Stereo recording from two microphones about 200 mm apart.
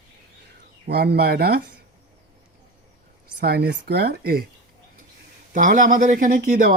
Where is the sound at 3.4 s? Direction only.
50° right (ahead or behind).